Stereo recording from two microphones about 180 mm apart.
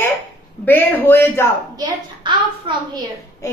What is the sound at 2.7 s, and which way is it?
Speech, 30° right (ahead or behind).